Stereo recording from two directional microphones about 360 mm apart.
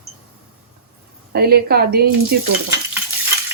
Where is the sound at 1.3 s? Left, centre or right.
Right.